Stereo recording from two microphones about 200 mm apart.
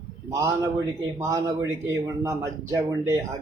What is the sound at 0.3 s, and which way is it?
A man's voice, 15° right (ahead or behind).